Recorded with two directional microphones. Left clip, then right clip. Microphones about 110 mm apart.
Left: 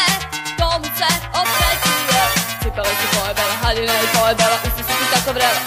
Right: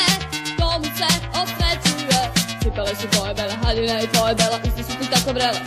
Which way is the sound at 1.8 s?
40° right (ahead or behind).